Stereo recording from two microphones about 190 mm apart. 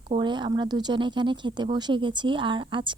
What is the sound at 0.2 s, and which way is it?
A woman's voice, 25° right (ahead or behind).